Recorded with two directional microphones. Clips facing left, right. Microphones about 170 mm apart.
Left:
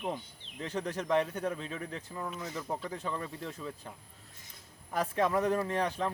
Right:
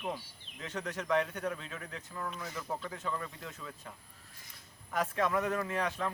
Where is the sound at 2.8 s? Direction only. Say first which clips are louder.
Left 2 dB; 35° left (ahead or behind).